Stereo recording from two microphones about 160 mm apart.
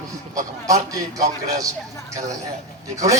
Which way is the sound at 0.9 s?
20° right (ahead or behind).